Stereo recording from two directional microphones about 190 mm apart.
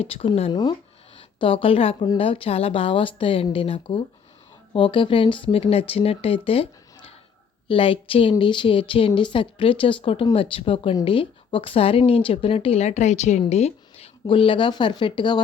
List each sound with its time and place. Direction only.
0.0 s speech: 30° left (ahead or behind)